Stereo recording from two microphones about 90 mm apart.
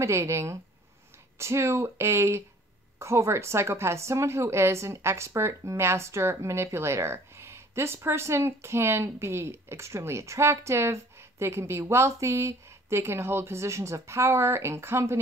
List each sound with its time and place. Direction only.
0.0 s a woman's voice: 30° right (ahead or behind)